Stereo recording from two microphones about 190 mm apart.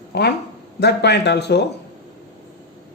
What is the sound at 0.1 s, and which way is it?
A man's voice, 60° left (ahead or behind).